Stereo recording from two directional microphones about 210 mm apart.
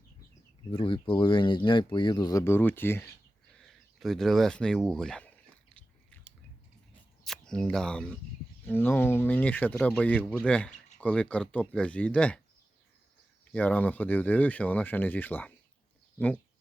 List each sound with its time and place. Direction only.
0.7 s speech: 25° left (ahead or behind); by 5.3 s 5° left (ahead or behind)
7.3 s speech: 5° left (ahead or behind)
13.4 s speech: 5° left (ahead or behind)